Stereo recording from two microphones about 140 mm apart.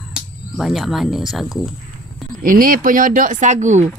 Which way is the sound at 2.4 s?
85° right.